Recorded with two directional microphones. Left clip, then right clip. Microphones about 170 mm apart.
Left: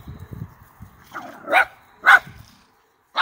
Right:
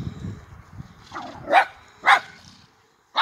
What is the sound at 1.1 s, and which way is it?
Dog, 10° left (ahead or behind).